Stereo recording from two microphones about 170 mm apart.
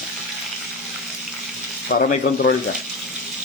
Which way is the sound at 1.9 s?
90° left.